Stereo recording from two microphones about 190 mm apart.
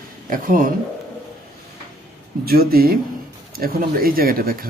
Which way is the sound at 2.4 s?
50° right (ahead or behind).